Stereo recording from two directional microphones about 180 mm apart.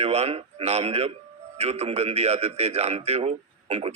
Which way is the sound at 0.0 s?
35° right (ahead or behind).